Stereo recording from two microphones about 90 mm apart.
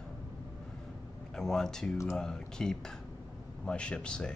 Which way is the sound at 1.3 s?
5° left (ahead or behind).